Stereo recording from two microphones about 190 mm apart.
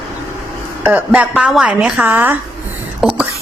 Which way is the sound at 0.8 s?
5° right (ahead or behind).